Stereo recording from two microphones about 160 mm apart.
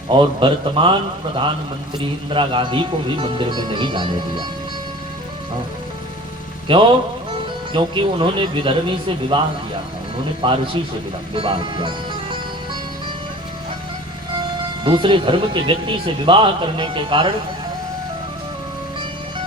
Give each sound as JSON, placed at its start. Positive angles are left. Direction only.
{"t": 0.1, "sound": "speech", "side_deg": -30}
{"t": 2.3, "sound": "speech", "side_deg": -30}
{"t": 6.7, "sound": "speech", "side_deg": -30}
{"t": 10.4, "sound": "a man's voice", "side_deg": -30}
{"t": 14.8, "sound": "speech", "side_deg": -30}